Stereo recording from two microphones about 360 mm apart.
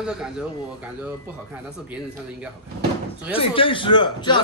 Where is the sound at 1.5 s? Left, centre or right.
Centre.